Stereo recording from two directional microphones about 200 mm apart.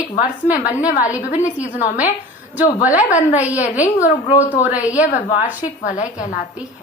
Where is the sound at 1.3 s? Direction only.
35° left (ahead or behind).